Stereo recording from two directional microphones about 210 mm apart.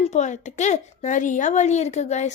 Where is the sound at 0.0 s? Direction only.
35° left (ahead or behind).